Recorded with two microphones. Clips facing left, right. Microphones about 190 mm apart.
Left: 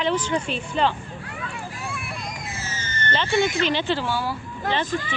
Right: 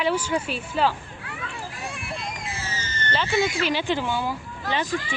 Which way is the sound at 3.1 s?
5° right (ahead or behind).